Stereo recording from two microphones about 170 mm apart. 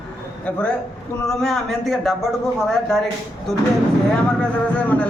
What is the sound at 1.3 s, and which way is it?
A man's voice, 5° left (ahead or behind).